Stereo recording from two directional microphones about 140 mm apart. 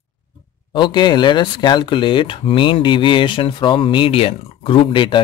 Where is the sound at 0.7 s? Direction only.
35° left (ahead or behind).